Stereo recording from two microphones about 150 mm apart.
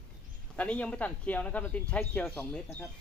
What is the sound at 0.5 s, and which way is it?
Speech, 10° left (ahead or behind).